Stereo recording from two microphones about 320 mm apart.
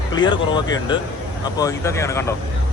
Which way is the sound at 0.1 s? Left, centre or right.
Centre.